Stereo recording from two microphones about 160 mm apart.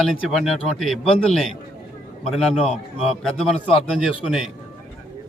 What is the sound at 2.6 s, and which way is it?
Speech, 40° left (ahead or behind).